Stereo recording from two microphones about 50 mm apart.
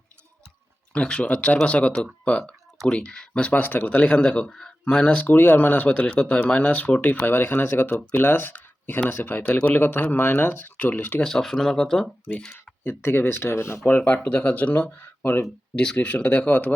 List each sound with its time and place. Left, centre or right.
0.9 s speech: left
3.5 s speech: left
4.3 s speech: centre
5.1 s speech: left
11.2 s speech: centre
12.5 s speech: left
13.8 s speech: left
15.7 s speech: centre